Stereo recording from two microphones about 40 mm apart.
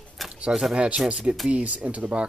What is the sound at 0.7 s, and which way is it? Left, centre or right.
Speech, right.